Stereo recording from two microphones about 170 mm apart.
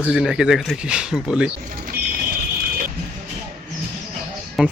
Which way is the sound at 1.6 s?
55° right (ahead or behind).